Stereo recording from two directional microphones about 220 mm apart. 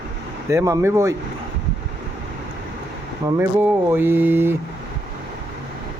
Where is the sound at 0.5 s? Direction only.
15° right (ahead or behind).